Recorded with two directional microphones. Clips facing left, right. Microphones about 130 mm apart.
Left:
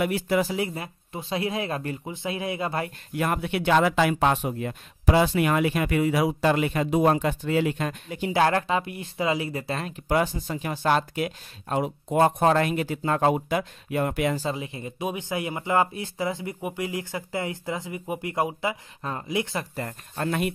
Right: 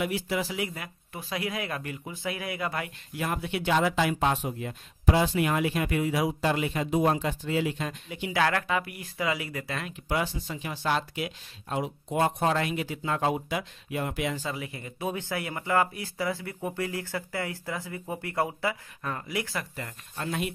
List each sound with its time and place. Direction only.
0.0 s speech: 55° left (ahead or behind)
0.6 s speech: 30° left (ahead or behind)
3.2 s speech: 60° left (ahead or behind)
8.3 s speech: 30° left (ahead or behind)
10.0 s speech: 50° left (ahead or behind)
14.4 s speech: 25° left (ahead or behind)
19.7 s speech: 45° left (ahead or behind)